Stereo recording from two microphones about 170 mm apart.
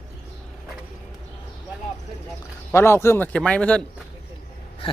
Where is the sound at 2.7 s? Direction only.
15° left (ahead or behind).